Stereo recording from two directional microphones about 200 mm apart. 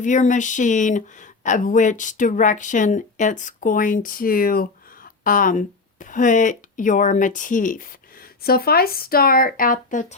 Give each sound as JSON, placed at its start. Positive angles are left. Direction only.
{"t": 0.0, "sound": "speech", "side_deg": 40}